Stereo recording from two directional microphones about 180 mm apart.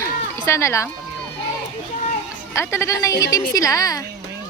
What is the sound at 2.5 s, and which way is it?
A woman's voice, 15° left (ahead or behind).